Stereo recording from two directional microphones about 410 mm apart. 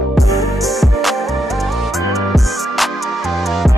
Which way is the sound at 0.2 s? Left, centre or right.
Centre.